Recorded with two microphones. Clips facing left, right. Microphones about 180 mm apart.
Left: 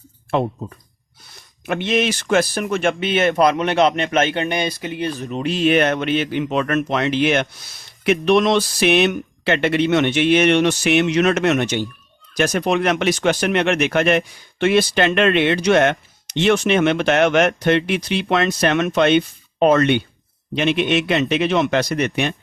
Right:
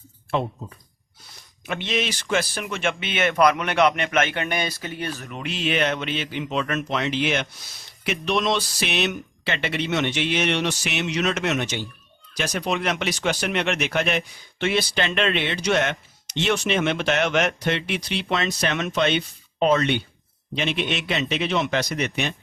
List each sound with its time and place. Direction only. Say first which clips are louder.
1.6 s speech: left 7 dB; 50° left (ahead or behind); by 5.4 s 20° left (ahead or behind)
5.4 s speech: left 8 dB; 40° left (ahead or behind)